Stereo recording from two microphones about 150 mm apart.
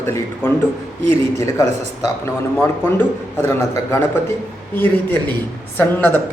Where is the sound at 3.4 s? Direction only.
15° left (ahead or behind).